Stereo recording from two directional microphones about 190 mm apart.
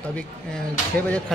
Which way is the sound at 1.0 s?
5° left (ahead or behind).